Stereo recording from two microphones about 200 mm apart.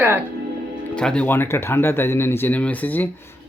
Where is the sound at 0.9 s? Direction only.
5° left (ahead or behind).